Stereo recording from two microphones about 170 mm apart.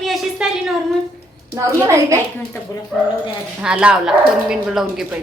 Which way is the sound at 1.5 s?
15° right (ahead or behind).